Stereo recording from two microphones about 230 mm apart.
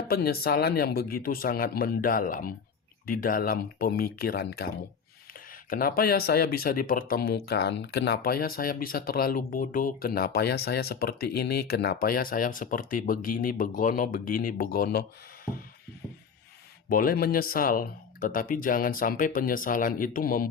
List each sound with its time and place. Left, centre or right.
0.1 s speech: left
16.9 s speech: left